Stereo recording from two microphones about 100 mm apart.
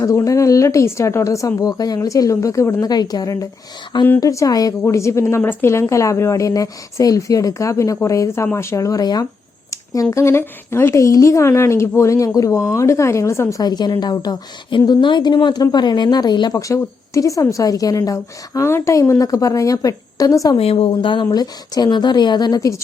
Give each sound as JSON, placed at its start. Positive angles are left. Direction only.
{"t": 0.0, "sound": "a woman's voice", "side_deg": 35}
{"t": 13.6, "sound": "a woman's voice", "side_deg": 45}
{"t": 20.6, "sound": "a woman's voice", "side_deg": 70}